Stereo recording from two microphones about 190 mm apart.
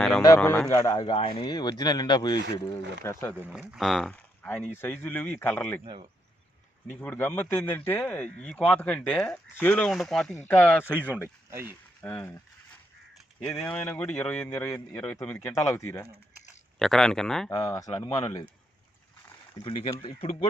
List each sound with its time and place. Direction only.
0.3 s speech: 5° left (ahead or behind)
0.7 s a man's voice: 15° left (ahead or behind)
3.7 s a man's voice: centre (ahead or behind)
5.8 s speech: 25° right (ahead or behind)
6.9 s a man's voice: 10° left (ahead or behind)
13.4 s a man's voice: 5° left (ahead or behind)
16.7 s speech: centre (ahead or behind)
17.5 s a man's voice: 15° left (ahead or behind)
19.6 s speech: 25° left (ahead or behind)